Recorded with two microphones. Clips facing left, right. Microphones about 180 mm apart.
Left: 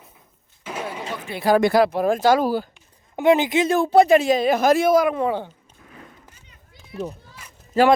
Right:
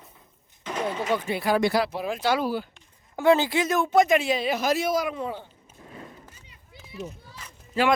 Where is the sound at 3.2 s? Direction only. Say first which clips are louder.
Left 3 dB; 20° left (ahead or behind); by 5.5 s 75° left (ahead or behind).